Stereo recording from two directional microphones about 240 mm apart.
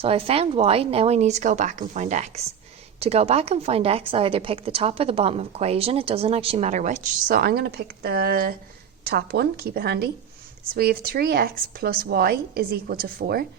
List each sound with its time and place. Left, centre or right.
0.0 s a woman's voice: right